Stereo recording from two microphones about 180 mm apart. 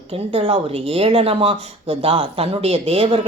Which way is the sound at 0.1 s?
35° right (ahead or behind).